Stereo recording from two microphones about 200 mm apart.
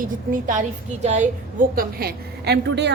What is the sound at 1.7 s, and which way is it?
A woman's voice, 50° right (ahead or behind).